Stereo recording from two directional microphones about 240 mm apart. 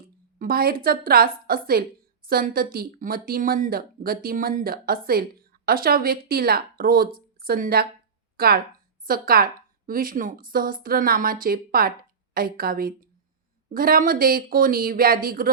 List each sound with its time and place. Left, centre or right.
0.3 s speech: right